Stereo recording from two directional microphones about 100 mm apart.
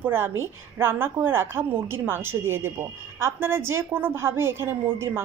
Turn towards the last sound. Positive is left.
turn(degrees=-25)  # may be behind; listen again after turning